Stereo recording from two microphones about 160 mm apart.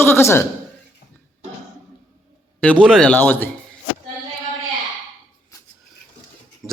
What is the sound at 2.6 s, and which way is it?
Speech, 5° left (ahead or behind).